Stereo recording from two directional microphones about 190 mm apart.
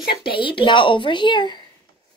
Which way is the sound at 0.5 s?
25° left (ahead or behind).